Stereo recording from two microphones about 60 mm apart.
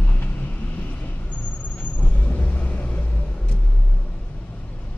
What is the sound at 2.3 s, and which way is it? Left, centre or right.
Vehicle, left.